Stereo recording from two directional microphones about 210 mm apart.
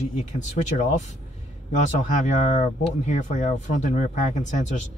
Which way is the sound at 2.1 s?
35° left (ahead or behind).